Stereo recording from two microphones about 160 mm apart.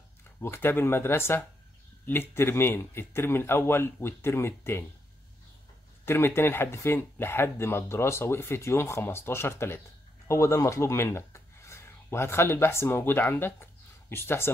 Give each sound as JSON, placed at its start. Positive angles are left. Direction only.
{"t": 0.4, "sound": "speech", "side_deg": 15}
{"t": 6.0, "sound": "speech", "side_deg": 15}